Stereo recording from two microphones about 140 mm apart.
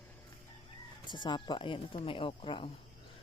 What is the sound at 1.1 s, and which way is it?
A woman's voice, 35° left (ahead or behind).